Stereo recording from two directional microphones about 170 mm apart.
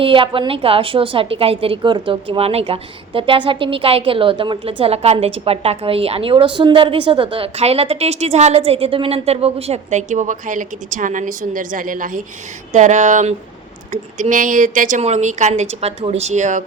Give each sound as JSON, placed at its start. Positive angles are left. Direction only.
{"t": 0.0, "sound": "a woman's voice", "side_deg": -30}